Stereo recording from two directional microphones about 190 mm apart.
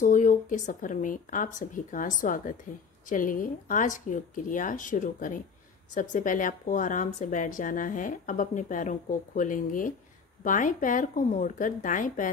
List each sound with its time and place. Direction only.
0.0 s speech: 45° left (ahead or behind)